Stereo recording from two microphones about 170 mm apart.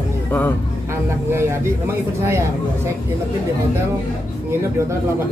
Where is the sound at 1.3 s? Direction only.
15° right (ahead or behind).